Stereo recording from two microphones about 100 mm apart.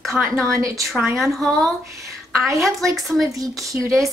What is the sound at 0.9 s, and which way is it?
Speech, centre (ahead or behind).